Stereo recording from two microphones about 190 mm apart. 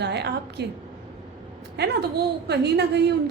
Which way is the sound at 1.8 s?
65° right (ahead or behind).